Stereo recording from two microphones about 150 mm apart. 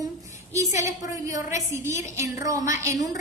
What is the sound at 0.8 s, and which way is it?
A woman's voice, 20° right (ahead or behind).